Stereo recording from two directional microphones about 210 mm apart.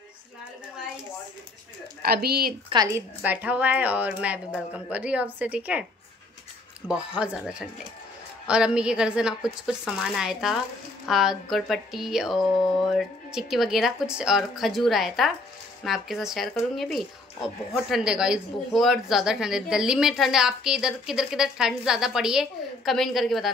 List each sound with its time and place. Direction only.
2.0 s speech: 45° right (ahead or behind)
2.7 s a woman's voice: 15° right (ahead or behind)
3.2 s a woman's voice: 5° right (ahead or behind)
6.9 s speech: 5° right (ahead or behind)